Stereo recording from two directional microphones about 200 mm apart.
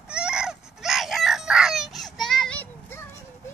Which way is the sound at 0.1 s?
5° right (ahead or behind).